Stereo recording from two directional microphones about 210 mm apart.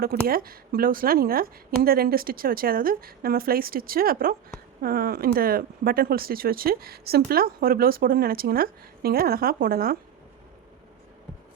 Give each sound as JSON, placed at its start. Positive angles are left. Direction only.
{"t": 0.3, "sound": "speech", "side_deg": -45}